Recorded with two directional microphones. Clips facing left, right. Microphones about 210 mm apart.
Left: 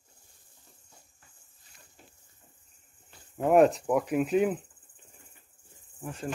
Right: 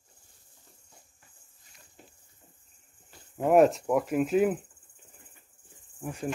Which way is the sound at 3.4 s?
Centre (ahead or behind).